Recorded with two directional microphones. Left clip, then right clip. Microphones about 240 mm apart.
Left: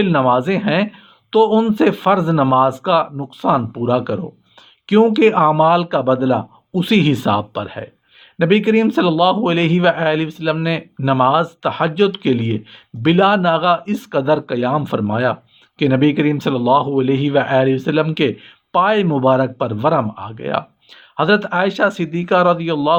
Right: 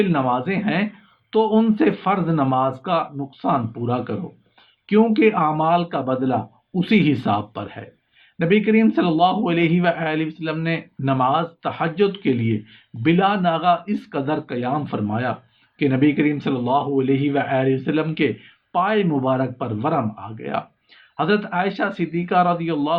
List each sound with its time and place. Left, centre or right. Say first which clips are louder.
0.0 s a man's voice: left 6 dB; left